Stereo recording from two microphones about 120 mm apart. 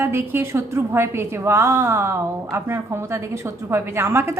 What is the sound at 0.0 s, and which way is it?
A woman's voice, 20° right (ahead or behind).